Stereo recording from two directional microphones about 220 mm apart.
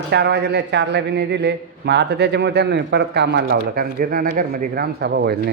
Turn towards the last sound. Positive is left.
turn(degrees=-45)  # may be behind; listen again after turning